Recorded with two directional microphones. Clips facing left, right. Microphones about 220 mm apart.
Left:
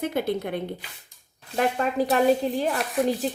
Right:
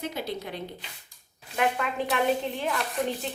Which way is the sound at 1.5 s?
35° left (ahead or behind).